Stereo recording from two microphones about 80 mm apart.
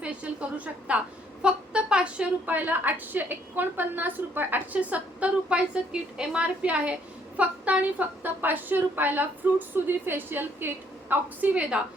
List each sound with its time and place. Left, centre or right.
0.0 s a woman's voice: centre